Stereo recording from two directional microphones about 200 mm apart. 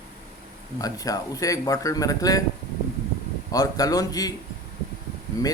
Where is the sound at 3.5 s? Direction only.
15° left (ahead or behind).